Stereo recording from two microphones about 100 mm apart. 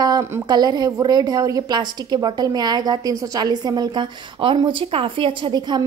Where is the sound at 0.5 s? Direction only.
45° right (ahead or behind).